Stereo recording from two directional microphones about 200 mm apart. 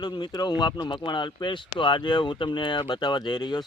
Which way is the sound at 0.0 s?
20° left (ahead or behind).